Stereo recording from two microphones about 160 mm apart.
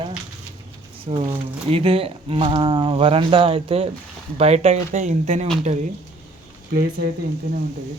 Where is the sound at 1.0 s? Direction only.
35° right (ahead or behind).